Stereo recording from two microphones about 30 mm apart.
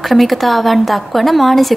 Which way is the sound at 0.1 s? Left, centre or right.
Centre.